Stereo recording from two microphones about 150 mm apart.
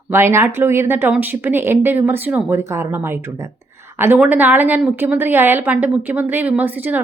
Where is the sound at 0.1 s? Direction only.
15° right (ahead or behind).